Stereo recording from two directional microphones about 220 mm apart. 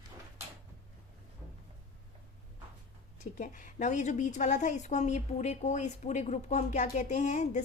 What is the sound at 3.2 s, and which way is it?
A woman's voice, 35° left (ahead or behind).